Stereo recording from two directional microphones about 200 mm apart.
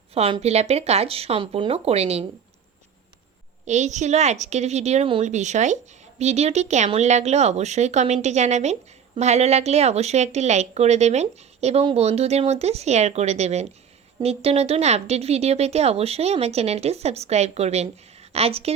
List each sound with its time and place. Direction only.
0.1 s a woman's voice: 30° right (ahead or behind)
3.7 s a woman's voice: 35° right (ahead or behind)